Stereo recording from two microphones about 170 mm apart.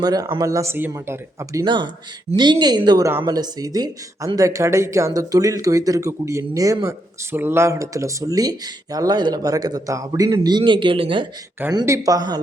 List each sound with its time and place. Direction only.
0.0 s a woman's voice: 20° right (ahead or behind)